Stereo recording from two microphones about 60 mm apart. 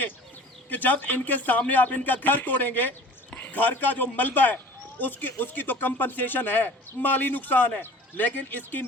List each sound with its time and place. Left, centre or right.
0.7 s a man's voice: left